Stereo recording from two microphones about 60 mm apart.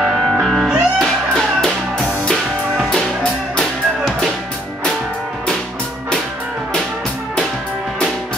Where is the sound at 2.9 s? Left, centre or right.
Centre.